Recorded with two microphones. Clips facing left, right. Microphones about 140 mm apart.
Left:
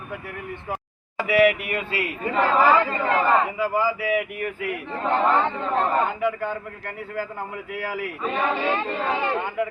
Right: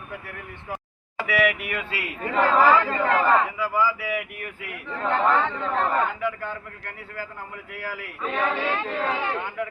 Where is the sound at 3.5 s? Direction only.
50° left (ahead or behind).